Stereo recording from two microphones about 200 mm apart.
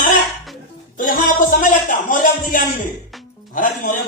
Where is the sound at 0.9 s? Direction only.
40° left (ahead or behind).